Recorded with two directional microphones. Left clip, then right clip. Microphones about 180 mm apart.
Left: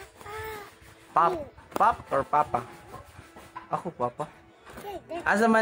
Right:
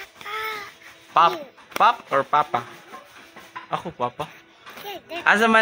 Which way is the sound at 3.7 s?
15° right (ahead or behind).